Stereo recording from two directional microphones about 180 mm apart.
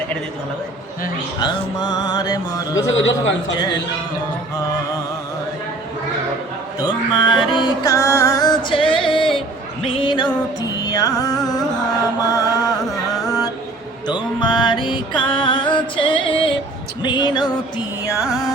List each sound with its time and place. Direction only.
1.4 s music: 20° left (ahead or behind)
6.8 s music: 25° left (ahead or behind)
9.8 s a sound: 30° left (ahead or behind)
10.8 s music: 20° left (ahead or behind)
13.1 s mantra: 20° left (ahead or behind)
14.1 s music: 25° left (ahead or behind)